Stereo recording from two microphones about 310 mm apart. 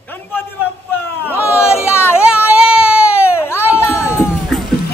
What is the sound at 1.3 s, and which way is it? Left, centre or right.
Speech, centre.